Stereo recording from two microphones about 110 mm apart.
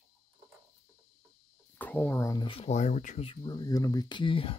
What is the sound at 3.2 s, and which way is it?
Speech, 40° left (ahead or behind).